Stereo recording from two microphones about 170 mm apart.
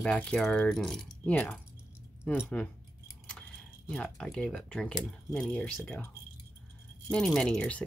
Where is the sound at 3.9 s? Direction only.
5° left (ahead or behind).